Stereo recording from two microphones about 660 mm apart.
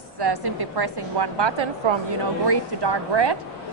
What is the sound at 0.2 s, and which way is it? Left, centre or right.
Speech, right.